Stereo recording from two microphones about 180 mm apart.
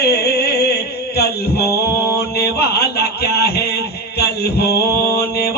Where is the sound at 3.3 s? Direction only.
60° left (ahead or behind).